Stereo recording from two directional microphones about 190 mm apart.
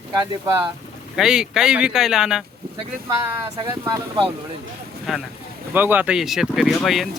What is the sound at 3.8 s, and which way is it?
Speech, 20° right (ahead or behind).